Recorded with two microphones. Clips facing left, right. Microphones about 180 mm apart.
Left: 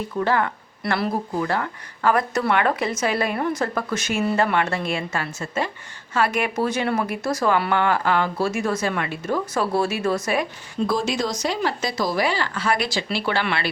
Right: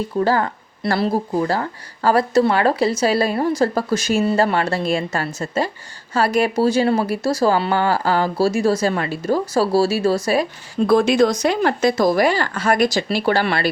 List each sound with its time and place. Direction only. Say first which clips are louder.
0.2 s speech: right 3 dB; 35° right (ahead or behind)
10.8 s speech: right 9 dB; 60° right (ahead or behind); by 13.7 s 40° right (ahead or behind)